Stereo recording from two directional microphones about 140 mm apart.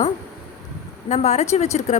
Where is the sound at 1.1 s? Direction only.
50° left (ahead or behind).